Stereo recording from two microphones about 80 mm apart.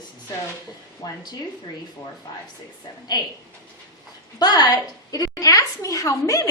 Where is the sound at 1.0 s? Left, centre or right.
Left.